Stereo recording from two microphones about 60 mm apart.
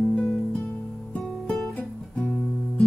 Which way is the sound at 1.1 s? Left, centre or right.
Centre.